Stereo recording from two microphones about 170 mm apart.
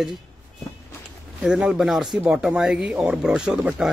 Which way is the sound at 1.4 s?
5° right (ahead or behind).